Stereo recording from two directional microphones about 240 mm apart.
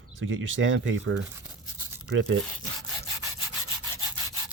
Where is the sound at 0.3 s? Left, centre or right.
Right.